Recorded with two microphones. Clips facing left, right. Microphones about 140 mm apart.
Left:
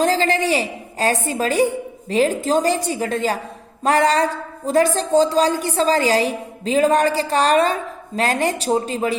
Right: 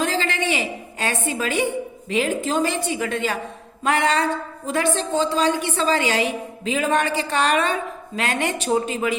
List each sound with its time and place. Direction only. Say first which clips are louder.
0.0 s a woman's voice: left 5 dB; 40° left (ahead or behind)